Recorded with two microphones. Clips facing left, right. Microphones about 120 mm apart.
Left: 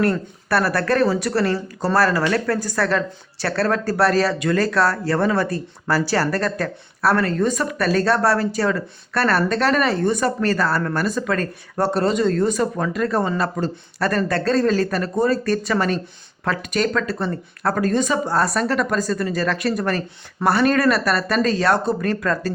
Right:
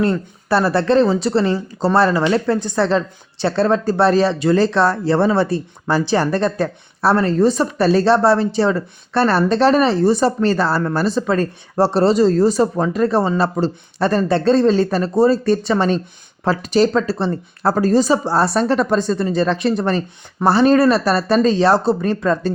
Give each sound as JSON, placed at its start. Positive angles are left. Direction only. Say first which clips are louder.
{"t": 0.0, "sound": "speech", "louder": "right 2 dB", "side_deg": -25}